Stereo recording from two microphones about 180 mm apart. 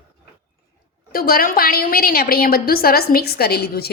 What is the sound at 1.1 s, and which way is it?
A woman's voice, 55° left (ahead or behind).